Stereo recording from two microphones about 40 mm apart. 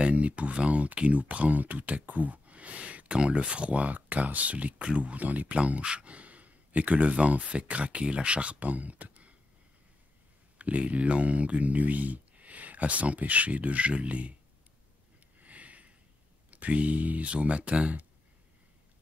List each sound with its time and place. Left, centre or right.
0.0 s speech: right
5.6 s speech: right
10.6 s speech: right
15.4 s a sound: right
16.4 s speech: right